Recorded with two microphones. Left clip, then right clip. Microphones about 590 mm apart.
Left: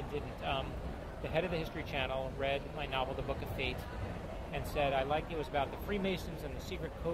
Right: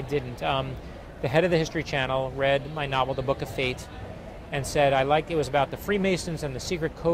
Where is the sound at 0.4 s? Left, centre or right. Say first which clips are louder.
Right 10 dB; right.